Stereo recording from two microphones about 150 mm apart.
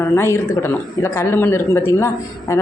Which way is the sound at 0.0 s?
15° left (ahead or behind).